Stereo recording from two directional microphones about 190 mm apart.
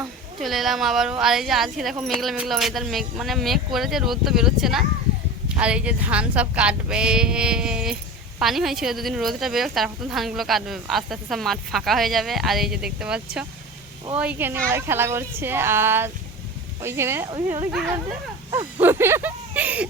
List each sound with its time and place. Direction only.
0.4 s a woman's voice: centre (ahead or behind); by 17.7 s 20° right (ahead or behind)
18.8 s speech: 10° right (ahead or behind)